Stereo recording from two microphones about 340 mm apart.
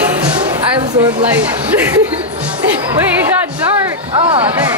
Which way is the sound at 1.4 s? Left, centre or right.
Centre.